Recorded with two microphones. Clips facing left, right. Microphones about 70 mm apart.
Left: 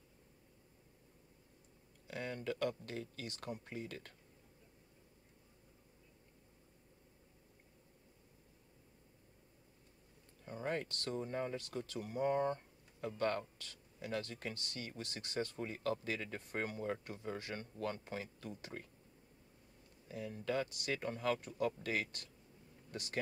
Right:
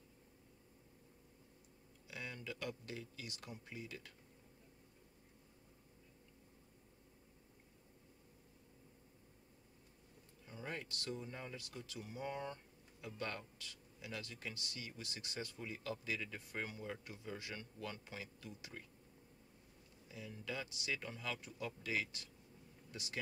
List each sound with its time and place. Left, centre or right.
2.0 s speech: left
10.4 s speech: left
20.1 s speech: left